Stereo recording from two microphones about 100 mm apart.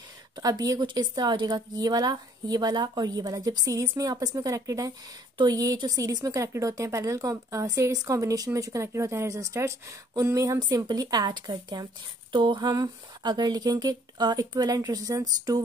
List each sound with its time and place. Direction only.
0.4 s speech: 40° right (ahead or behind)
10.6 s speech: 40° right (ahead or behind)